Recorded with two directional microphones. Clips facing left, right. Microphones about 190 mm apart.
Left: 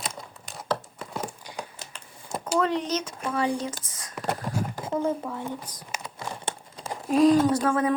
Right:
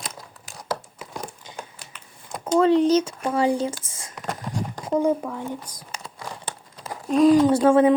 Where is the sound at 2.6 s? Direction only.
30° right (ahead or behind).